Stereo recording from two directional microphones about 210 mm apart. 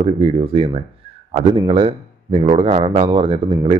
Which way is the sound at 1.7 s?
25° right (ahead or behind).